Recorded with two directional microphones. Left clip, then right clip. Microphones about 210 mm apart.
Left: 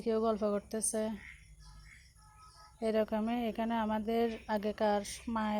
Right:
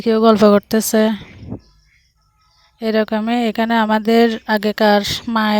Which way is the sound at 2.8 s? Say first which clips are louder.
Right 15 dB; 55° right (ahead or behind).